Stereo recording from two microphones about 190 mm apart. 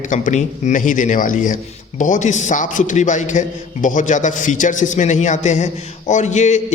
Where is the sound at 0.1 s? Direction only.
40° left (ahead or behind).